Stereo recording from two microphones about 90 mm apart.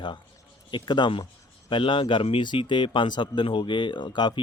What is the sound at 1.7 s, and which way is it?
Speech, 70° left (ahead or behind).